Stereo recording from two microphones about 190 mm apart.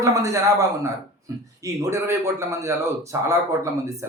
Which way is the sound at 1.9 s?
15° right (ahead or behind).